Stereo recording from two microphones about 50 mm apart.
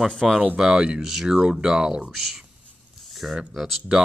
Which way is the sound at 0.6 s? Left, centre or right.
Centre.